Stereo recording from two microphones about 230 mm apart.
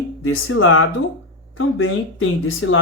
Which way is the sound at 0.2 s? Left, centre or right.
Left.